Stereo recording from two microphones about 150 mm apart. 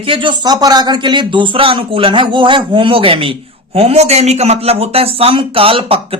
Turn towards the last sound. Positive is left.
turn(degrees=-40)  # may be behind; listen again after turning